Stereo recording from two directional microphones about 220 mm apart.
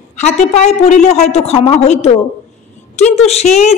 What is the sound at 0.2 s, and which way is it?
A woman's voice, 30° left (ahead or behind).